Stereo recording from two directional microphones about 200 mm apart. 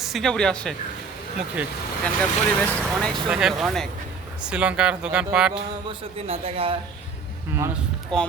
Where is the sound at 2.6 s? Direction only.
5° left (ahead or behind).